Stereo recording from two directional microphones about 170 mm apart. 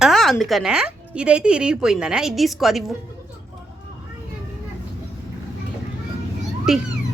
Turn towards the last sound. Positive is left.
turn(degrees=-5)  # may be behind; listen again after turning